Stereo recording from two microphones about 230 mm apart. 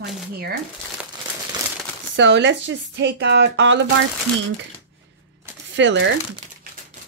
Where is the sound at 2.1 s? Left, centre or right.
Right.